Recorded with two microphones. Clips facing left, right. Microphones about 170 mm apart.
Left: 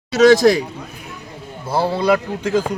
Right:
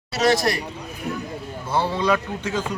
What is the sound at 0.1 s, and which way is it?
Speech, 90° left.